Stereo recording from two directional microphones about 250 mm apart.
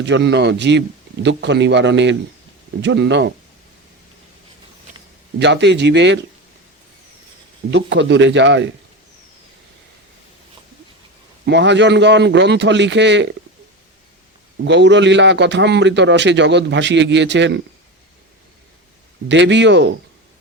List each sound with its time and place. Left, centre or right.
0.0 s a man's voice: right
5.4 s a man's voice: right
7.7 s a man's voice: right
11.4 s a man's voice: right
14.7 s a man's voice: right
19.3 s a man's voice: right